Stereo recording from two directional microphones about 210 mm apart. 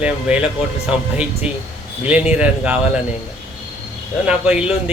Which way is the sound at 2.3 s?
5° right (ahead or behind).